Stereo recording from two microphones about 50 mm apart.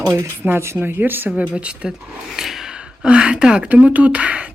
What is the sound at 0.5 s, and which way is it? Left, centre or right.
Speech, right.